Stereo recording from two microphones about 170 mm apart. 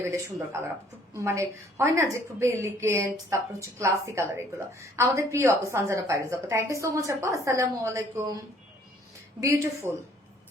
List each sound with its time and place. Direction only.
0.0 s a woman's voice: 15° right (ahead or behind)
9.4 s a woman's voice: 15° right (ahead or behind)